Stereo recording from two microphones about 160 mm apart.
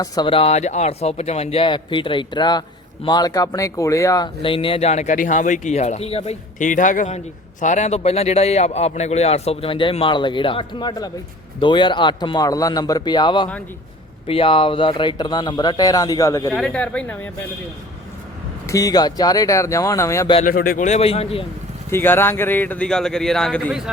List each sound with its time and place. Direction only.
0.0 s speech: 30° left (ahead or behind)
4.4 s speech: 35° left (ahead or behind)
6.6 s speech: 55° left (ahead or behind); by 16.6 s 20° left (ahead or behind)
16.6 s a man's voice: 5° left (ahead or behind)
18.6 s speech: 20° left (ahead or behind)
20.4 s speech: 65° left (ahead or behind); by 21.4 s 40° left (ahead or behind)
21.8 s a man's voice: 15° left (ahead or behind)